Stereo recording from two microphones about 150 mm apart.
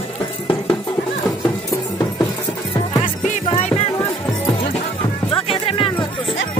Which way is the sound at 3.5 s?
45° left (ahead or behind).